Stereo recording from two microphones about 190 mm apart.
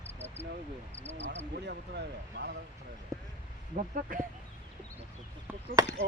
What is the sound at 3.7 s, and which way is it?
Speech, 40° right (ahead or behind).